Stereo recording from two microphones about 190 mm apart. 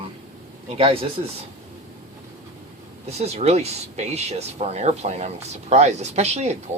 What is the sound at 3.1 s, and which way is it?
Speech, 35° right (ahead or behind).